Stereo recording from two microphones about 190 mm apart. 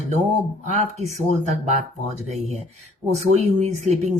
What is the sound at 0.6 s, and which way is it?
Speech, 35° right (ahead or behind).